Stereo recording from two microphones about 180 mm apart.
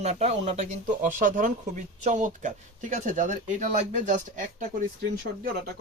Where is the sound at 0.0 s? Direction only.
40° right (ahead or behind).